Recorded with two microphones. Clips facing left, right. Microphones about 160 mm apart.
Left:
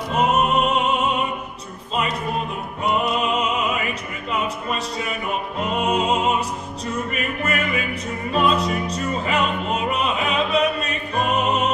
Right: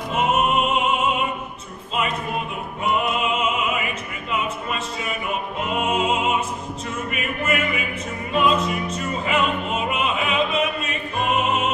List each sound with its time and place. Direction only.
0.1 s music: 40° left (ahead or behind)
2.8 s music: 35° left (ahead or behind)
5.7 s music: 40° left (ahead or behind)